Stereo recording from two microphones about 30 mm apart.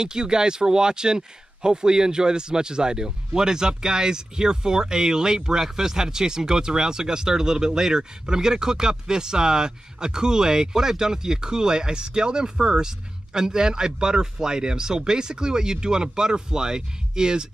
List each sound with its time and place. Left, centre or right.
0.0 s speech: right